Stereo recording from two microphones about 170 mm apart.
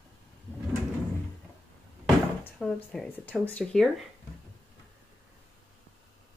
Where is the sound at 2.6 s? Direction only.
5° left (ahead or behind).